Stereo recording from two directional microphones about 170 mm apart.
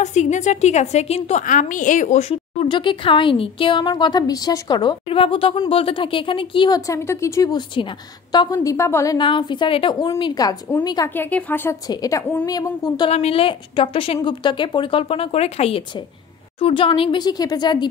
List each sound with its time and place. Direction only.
0.0 s a woman's voice: 45° left (ahead or behind); by 11.1 s 25° left (ahead or behind)
11.1 s speech: 10° left (ahead or behind)
11.9 s a woman's voice: 20° left (ahead or behind)
13.1 s a woman's voice: 35° left (ahead or behind)